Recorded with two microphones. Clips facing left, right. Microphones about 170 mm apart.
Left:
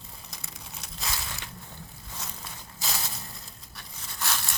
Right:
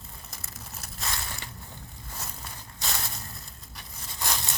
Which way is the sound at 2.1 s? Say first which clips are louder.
Even; 5° right (ahead or behind).